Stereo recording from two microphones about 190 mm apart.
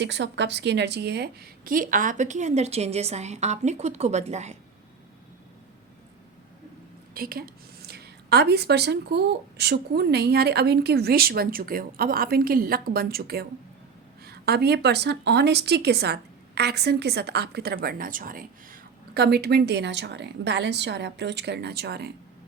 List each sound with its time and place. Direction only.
0.0 s a woman's voice: 70° right (ahead or behind); by 4.5 s 35° right (ahead or behind)
7.1 s a woman's voice: 50° right (ahead or behind)